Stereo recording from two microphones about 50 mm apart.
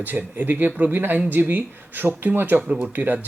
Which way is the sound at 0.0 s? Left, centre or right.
Right.